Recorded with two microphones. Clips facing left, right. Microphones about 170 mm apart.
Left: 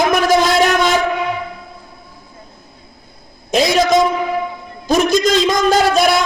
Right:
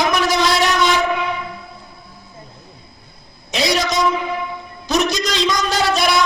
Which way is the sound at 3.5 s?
50° left (ahead or behind).